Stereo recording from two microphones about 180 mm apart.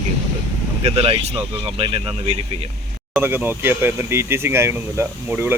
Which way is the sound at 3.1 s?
10° right (ahead or behind).